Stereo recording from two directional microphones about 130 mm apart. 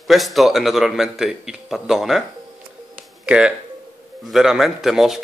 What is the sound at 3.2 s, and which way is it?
A man's voice, 5° right (ahead or behind).